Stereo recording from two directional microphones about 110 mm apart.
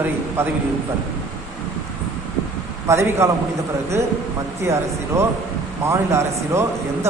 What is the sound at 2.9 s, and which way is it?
Speech, 25° right (ahead or behind).